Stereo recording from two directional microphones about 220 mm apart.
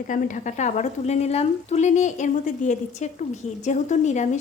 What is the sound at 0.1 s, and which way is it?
Speech, 35° left (ahead or behind).